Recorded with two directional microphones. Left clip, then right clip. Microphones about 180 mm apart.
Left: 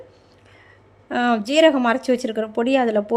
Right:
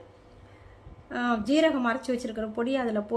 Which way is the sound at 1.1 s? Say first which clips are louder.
Left 8 dB; 30° left (ahead or behind).